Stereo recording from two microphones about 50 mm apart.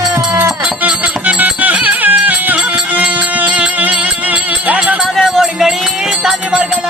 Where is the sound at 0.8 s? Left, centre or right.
Right.